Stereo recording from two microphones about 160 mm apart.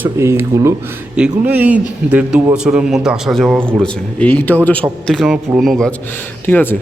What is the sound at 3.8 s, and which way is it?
Speech, 10° left (ahead or behind).